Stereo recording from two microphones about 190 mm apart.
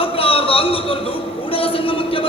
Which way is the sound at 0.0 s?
30° left (ahead or behind).